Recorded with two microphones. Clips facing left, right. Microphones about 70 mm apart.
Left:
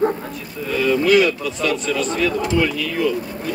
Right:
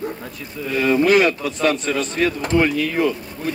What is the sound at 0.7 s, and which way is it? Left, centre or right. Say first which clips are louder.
A man's voice: even; right.